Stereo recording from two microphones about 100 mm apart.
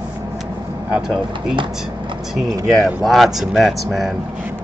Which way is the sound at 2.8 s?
Centre (ahead or behind).